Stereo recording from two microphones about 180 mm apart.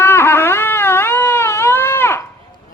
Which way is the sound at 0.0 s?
15° left (ahead or behind).